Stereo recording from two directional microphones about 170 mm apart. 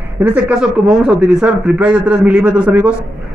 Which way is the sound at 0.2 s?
10° right (ahead or behind).